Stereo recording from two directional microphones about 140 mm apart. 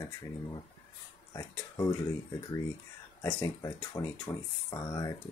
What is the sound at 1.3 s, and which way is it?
Speech, 25° left (ahead or behind).